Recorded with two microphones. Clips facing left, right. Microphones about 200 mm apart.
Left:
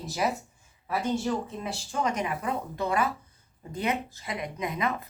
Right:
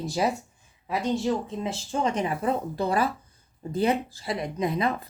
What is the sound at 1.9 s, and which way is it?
Speech, 30° right (ahead or behind).